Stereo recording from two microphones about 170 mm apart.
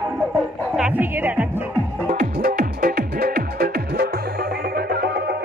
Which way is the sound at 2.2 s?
60° right (ahead or behind).